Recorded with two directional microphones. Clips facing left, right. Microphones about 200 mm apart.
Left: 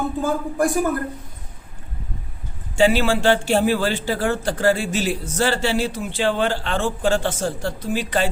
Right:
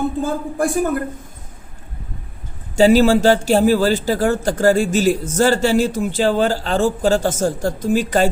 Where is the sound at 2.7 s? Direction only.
40° right (ahead or behind).